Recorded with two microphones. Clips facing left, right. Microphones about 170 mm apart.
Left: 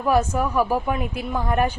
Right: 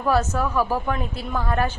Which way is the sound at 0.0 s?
15° left (ahead or behind).